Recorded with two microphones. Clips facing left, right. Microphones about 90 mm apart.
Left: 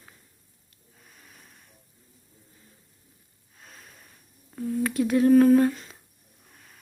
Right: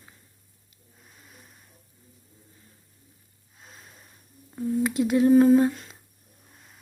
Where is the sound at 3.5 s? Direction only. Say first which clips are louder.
Even; 20° right (ahead or behind).